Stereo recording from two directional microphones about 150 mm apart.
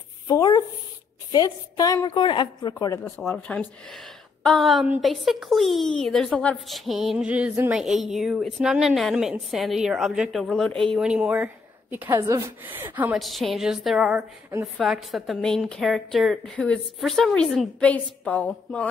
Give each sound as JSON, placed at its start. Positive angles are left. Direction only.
{"t": 0.3, "sound": "a woman's voice", "side_deg": 25}
{"t": 3.0, "sound": "a woman's voice", "side_deg": 10}
{"t": 13.2, "sound": "a woman's voice", "side_deg": 0}